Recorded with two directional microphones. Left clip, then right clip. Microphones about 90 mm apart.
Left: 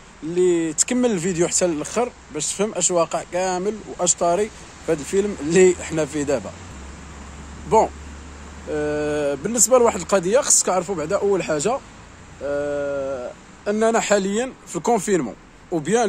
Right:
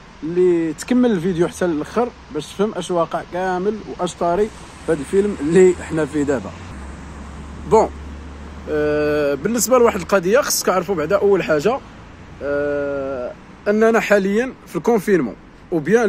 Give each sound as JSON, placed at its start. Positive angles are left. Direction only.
{"t": 0.4, "sound": "speech", "side_deg": 40}
{"t": 5.2, "sound": "speech", "side_deg": 0}
{"t": 5.5, "sound": "speech", "side_deg": 35}
{"t": 8.6, "sound": "speech", "side_deg": 25}